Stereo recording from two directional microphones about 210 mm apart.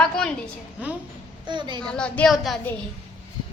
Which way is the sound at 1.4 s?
20° right (ahead or behind).